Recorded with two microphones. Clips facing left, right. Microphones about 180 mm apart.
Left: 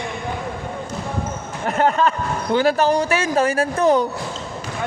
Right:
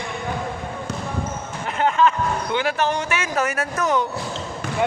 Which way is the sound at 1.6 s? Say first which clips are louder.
Left 1 dB; 45° left (ahead or behind).